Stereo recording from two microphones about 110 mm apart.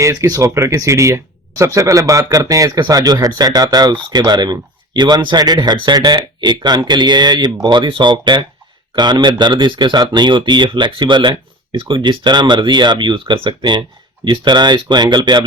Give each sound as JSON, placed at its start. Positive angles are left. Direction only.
{"t": 0.0, "sound": "speech", "side_deg": -30}